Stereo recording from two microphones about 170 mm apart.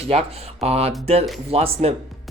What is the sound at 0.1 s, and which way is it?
Speech, 35° right (ahead or behind).